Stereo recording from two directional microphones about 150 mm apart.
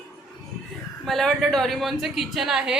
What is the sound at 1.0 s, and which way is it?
Speech, centre (ahead or behind).